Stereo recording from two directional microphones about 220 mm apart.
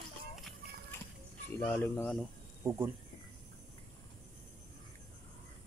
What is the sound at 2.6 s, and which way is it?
Speech, 10° right (ahead or behind).